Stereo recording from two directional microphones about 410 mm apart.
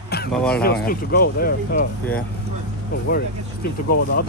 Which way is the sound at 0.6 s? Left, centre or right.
Left.